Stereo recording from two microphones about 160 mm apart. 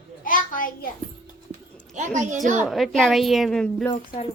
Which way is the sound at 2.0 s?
50° right (ahead or behind).